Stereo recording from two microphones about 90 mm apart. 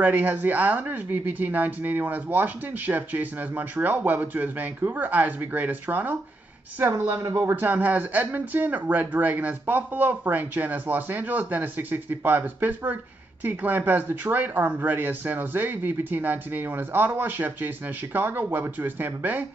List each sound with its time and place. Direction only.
0.0 s speech: 20° right (ahead or behind)
7.5 s speech: 20° right (ahead or behind)